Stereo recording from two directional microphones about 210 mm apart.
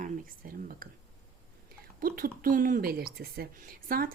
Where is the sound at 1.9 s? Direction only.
45° right (ahead or behind).